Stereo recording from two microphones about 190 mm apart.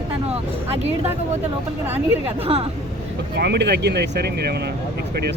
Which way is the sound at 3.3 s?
60° right (ahead or behind).